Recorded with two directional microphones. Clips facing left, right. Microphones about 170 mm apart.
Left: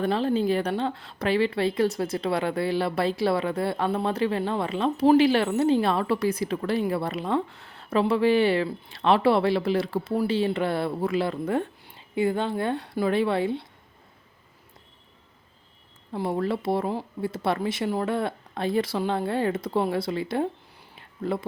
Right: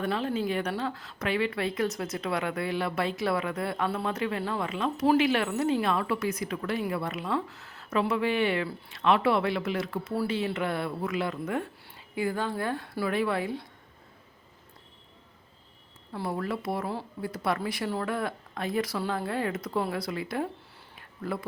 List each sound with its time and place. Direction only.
0.0 s a woman's voice: 30° left (ahead or behind)
16.1 s speech: 25° left (ahead or behind)
20.9 s a sound: 25° left (ahead or behind)